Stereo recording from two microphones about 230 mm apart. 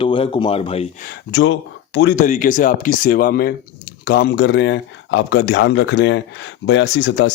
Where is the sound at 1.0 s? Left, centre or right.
Left.